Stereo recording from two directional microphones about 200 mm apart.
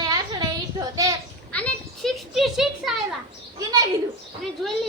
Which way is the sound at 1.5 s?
5° left (ahead or behind).